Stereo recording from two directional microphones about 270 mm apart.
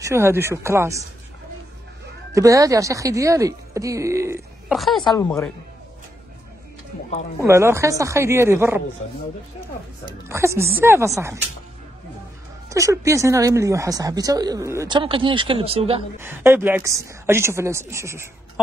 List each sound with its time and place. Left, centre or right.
0.0 s speech: centre
2.3 s speech: centre
4.7 s speech: centre
5.0 s a woman's voice: centre
7.4 s speech: centre
10.0 s speech: centre
12.6 s speech: centre
16.2 s speech: centre